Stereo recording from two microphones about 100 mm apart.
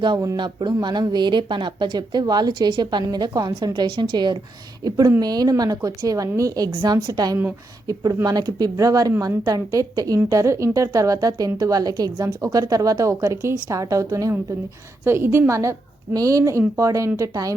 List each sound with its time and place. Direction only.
0.0 s a woman's voice: 50° right (ahead or behind)